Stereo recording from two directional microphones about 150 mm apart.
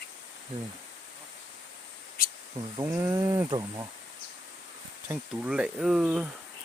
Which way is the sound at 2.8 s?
20° right (ahead or behind).